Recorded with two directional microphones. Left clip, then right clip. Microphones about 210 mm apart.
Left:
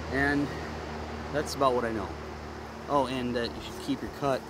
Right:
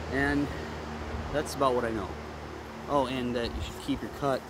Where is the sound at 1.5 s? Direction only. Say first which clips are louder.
Left 1 dB; centre (ahead or behind).